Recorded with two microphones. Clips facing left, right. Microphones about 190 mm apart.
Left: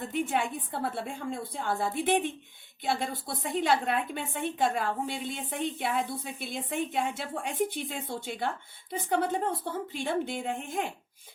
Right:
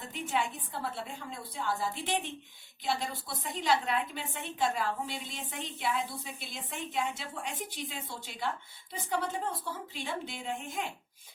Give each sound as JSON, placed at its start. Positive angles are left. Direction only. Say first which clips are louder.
{"t": 0.0, "sound": "a woman's voice", "louder": "left 4 dB", "side_deg": 55}